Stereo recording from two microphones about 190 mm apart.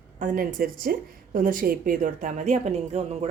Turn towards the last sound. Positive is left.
turn(degrees=-35)  # may be behind; listen again after turning